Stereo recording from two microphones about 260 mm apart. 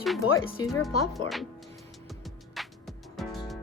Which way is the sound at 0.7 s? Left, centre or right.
Centre.